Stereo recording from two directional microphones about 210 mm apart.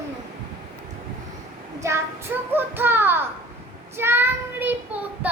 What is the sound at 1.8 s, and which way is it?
A child's voice, 15° right (ahead or behind).